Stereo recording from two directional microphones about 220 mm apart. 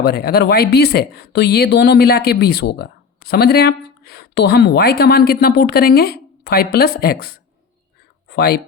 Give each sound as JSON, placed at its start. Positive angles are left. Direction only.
{"t": 0.0, "sound": "speech", "side_deg": 45}